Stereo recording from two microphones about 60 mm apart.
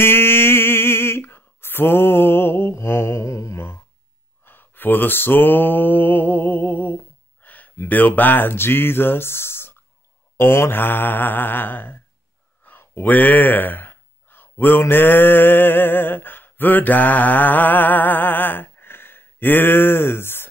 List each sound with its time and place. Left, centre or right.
0.0 s a sound: left
2.7 s music: left
4.5 s mantra: left
7.4 s a sound: left
7.9 s mantra: left
12.6 s speech: left